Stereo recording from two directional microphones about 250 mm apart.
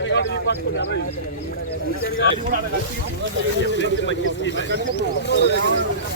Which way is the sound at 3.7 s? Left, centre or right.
Left.